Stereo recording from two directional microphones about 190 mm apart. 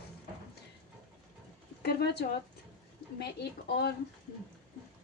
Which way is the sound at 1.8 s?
60° left (ahead or behind).